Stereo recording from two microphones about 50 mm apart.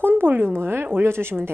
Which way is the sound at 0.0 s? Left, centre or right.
Right.